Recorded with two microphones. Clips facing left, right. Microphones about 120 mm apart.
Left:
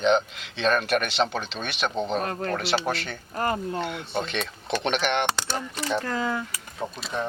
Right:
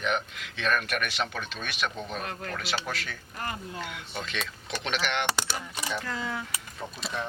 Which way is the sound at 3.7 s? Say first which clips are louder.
Left 8 dB; 30° left (ahead or behind).